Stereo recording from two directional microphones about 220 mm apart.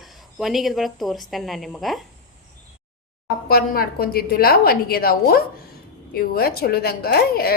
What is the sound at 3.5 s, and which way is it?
A woman's voice, 40° left (ahead or behind).